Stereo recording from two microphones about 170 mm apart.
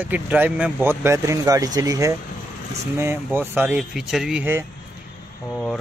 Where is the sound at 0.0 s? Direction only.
10° right (ahead or behind).